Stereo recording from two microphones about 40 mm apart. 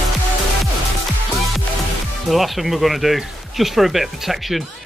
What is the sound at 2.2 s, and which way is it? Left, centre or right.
Speech, centre.